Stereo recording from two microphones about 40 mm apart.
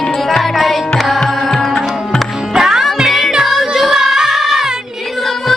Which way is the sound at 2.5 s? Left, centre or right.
Centre.